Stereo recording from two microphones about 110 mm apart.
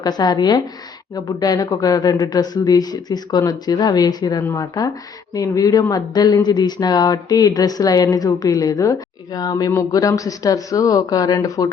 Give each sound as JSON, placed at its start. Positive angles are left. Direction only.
{"t": 0.0, "sound": "speech", "side_deg": 40}